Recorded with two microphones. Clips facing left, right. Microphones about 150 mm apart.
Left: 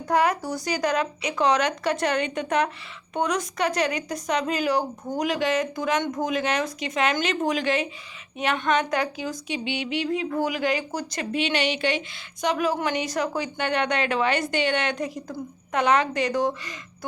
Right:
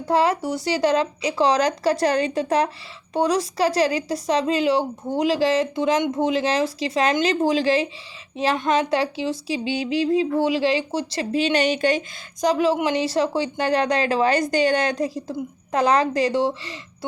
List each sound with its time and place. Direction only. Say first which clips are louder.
0.0 s speech: right 3 dB; 30° right (ahead or behind)